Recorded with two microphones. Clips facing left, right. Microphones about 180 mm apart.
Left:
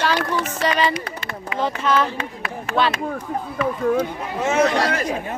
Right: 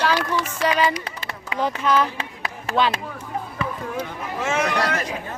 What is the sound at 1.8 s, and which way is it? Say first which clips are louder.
Speech: even; 15° right (ahead or behind).